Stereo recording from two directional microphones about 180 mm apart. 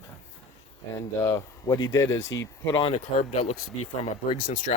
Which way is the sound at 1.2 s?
20° left (ahead or behind).